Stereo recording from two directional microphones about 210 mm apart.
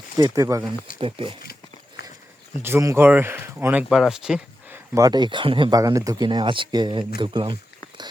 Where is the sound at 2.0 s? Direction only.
50° left (ahead or behind).